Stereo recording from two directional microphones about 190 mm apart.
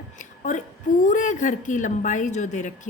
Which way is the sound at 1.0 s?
40° left (ahead or behind).